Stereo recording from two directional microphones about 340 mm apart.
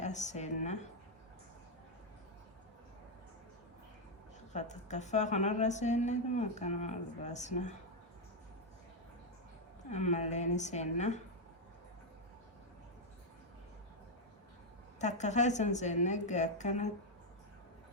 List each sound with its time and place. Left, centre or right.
0.0 s speech: left
4.5 s speech: left
9.9 s speech: centre
14.9 s speech: left